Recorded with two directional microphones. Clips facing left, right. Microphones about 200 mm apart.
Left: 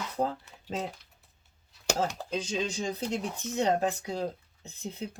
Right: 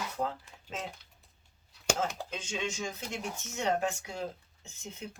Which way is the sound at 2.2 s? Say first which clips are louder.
Left 5 dB; 35° left (ahead or behind).